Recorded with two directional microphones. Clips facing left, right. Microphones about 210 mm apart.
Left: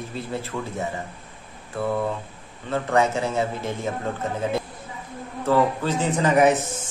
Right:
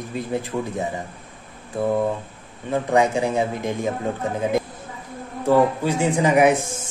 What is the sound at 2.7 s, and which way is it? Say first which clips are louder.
A man's voice: right 2 dB; 15° right (ahead or behind).